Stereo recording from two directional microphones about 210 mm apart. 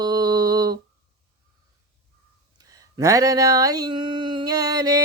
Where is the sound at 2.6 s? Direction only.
15° right (ahead or behind).